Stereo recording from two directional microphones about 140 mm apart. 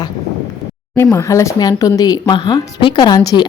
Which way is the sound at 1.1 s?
20° left (ahead or behind).